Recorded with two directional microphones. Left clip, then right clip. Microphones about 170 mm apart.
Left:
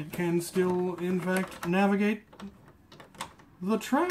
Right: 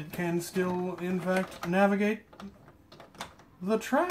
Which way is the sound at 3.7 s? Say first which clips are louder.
Right 1 dB; 20° right (ahead or behind).